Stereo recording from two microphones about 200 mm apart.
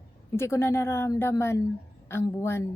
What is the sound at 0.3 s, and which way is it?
A woman's voice, 10° left (ahead or behind).